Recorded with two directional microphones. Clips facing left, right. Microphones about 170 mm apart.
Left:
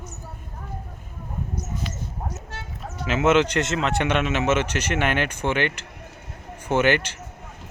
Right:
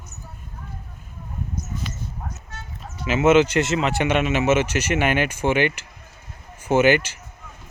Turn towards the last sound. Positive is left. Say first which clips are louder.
# right 3 dB
turn(degrees=-5)  # may be behind; listen again after turning